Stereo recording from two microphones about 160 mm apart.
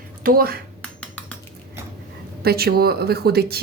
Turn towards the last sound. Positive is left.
turn(degrees=-80)